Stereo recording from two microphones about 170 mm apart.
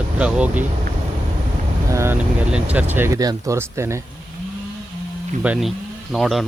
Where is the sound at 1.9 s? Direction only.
15° right (ahead or behind).